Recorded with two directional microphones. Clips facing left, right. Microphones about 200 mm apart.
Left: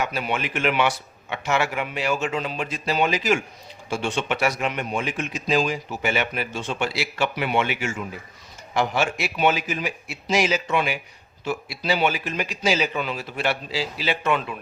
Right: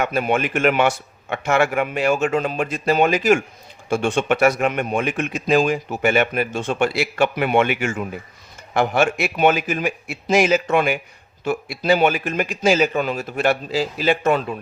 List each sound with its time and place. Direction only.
0.0 s a man's voice: 50° right (ahead or behind)